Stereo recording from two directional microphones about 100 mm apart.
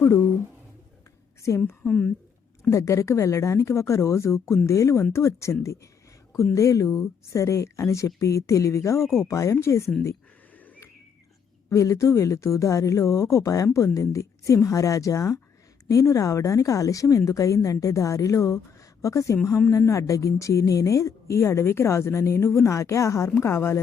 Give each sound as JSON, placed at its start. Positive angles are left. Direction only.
{"t": 1.4, "sound": "a woman's voice", "side_deg": 30}
{"t": 1.8, "sound": "speech", "side_deg": 10}
{"t": 2.6, "sound": "a woman's voice", "side_deg": 30}
{"t": 11.7, "sound": "a woman's voice", "side_deg": 30}